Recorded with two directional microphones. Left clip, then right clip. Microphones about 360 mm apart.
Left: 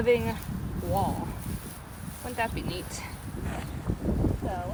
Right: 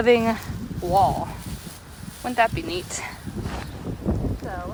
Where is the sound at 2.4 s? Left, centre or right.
Right.